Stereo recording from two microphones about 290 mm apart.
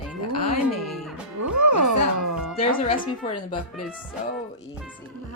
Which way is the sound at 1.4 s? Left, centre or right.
Right.